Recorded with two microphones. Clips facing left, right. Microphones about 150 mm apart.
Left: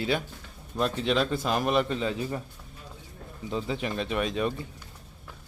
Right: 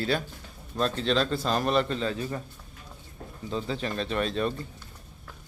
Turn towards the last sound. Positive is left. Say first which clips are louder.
# even
turn(degrees=10)  # may be behind; listen again after turning